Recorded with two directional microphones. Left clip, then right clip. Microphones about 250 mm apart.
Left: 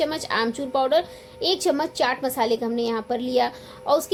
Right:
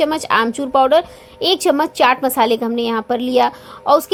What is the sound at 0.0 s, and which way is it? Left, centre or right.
A child's voice, right.